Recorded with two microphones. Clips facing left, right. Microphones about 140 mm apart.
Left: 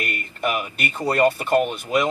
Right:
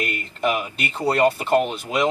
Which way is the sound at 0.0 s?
20° right (ahead or behind).